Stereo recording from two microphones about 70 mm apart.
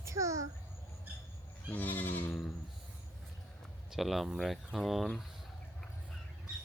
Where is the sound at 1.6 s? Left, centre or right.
Left.